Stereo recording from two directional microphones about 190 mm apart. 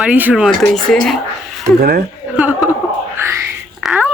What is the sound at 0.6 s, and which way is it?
Speech, 5° left (ahead or behind).